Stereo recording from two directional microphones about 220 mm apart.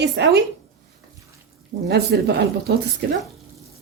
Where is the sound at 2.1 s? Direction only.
50° right (ahead or behind).